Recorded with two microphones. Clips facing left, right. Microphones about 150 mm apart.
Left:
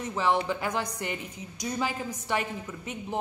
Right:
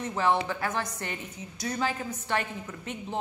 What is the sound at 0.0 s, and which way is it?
A woman's voice, 15° left (ahead or behind).